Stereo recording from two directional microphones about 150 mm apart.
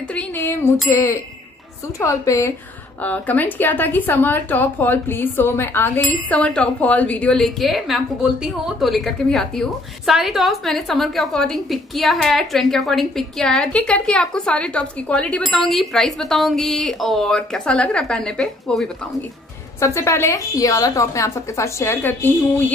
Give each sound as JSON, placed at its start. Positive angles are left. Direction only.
{"t": 0.1, "sound": "a sound", "side_deg": 15}
{"t": 0.8, "sound": "a woman's voice", "side_deg": 20}
{"t": 19.8, "sound": "a woman's voice", "side_deg": 20}